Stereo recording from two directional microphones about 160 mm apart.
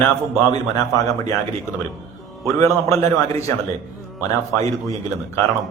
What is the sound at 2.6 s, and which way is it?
Speech, 20° left (ahead or behind).